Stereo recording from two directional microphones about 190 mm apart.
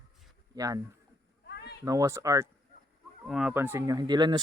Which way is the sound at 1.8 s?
15° right (ahead or behind).